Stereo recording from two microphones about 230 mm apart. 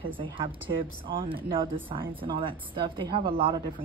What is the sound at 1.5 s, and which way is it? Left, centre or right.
Speech, right.